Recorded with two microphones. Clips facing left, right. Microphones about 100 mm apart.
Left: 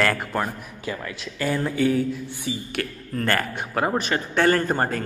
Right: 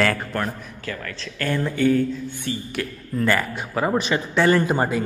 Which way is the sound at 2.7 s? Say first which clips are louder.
Right 2 dB; 55° left (ahead or behind).